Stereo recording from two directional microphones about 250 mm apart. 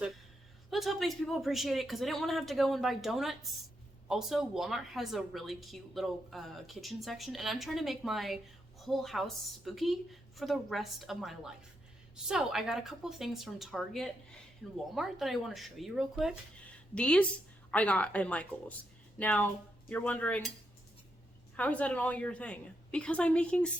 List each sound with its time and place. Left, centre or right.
0.7 s speech: centre
21.5 s speech: centre